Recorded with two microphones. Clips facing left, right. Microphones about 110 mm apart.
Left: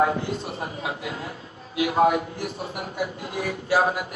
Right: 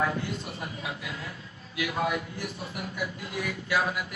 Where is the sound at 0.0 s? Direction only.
35° left (ahead or behind).